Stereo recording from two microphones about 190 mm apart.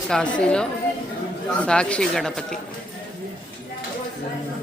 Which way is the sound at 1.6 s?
5° left (ahead or behind).